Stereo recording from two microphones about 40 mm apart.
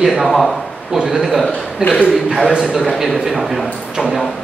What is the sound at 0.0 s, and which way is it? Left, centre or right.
Speech, centre.